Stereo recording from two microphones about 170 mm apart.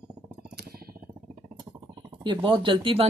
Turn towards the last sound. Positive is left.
turn(degrees=-30)  # may be behind; listen again after turning